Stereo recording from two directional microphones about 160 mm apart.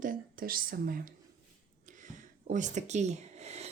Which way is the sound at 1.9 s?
50° right (ahead or behind).